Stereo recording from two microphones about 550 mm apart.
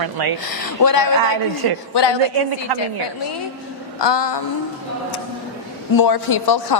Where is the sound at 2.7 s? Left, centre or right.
Right.